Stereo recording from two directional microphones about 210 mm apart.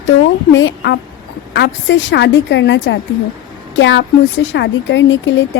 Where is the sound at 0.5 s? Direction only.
55° left (ahead or behind).